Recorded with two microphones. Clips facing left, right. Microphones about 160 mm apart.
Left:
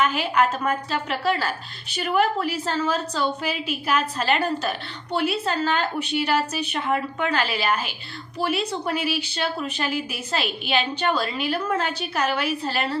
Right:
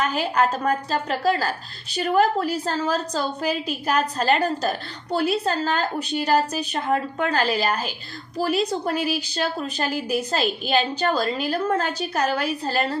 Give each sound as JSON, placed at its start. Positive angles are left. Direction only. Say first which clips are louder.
{"t": 0.0, "sound": "a woman's voice", "louder": "even", "side_deg": -40}